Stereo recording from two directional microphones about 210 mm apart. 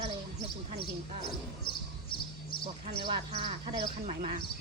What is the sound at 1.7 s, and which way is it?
Basketball bounce, 25° left (ahead or behind).